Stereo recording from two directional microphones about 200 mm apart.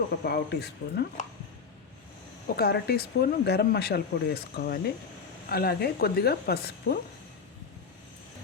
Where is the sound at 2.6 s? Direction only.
55° left (ahead or behind).